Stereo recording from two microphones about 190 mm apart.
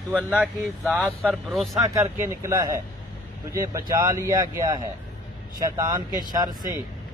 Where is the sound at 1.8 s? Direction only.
15° right (ahead or behind).